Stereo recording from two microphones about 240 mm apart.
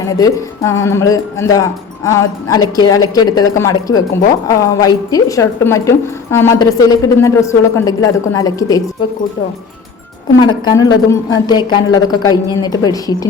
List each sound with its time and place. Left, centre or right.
0.0 s a woman's voice: centre
10.7 s a woman's voice: centre